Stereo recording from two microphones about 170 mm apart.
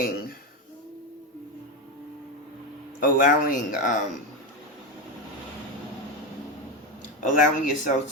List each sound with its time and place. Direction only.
0.0 s a sound: 60° left (ahead or behind)
3.0 s speech: 50° left (ahead or behind)
7.2 s speech: 50° left (ahead or behind)